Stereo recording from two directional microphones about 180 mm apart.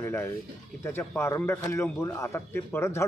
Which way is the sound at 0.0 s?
15° left (ahead or behind).